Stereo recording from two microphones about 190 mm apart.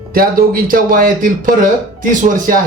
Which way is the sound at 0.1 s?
50° right (ahead or behind).